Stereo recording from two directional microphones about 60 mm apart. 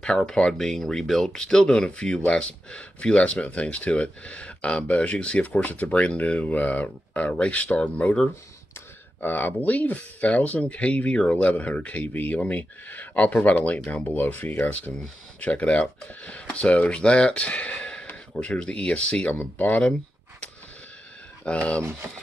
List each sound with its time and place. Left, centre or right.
0.3 s speech: centre
9.2 s speech: left
14.0 s speech: left
14.6 s speech: left
19.2 s speech: left
21.5 s speech: centre